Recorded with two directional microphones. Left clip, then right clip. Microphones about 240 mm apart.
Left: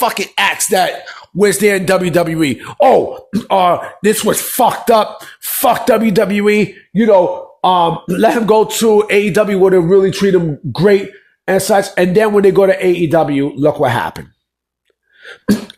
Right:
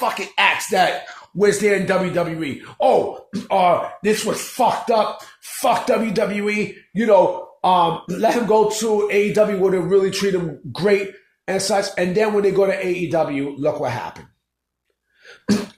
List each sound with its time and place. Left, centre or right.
0.0 s speech: left
6.9 s speech: left